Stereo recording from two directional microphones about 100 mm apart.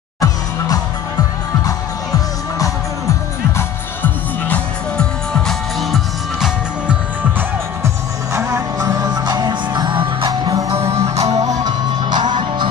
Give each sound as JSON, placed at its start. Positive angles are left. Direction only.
{"t": 3.5, "sound": "music", "side_deg": 20}
{"t": 4.9, "sound": "music", "side_deg": 5}
{"t": 7.3, "sound": "music", "side_deg": -30}
{"t": 10.2, "sound": "music", "side_deg": -40}
{"t": 10.9, "sound": "music", "side_deg": -90}
{"t": 11.2, "sound": "music", "side_deg": -35}